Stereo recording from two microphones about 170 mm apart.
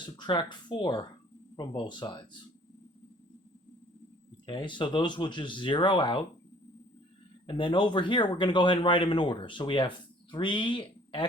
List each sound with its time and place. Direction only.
0.0 s speech: 25° left (ahead or behind)
4.4 s speech: 30° left (ahead or behind)
7.4 s speech: 30° left (ahead or behind)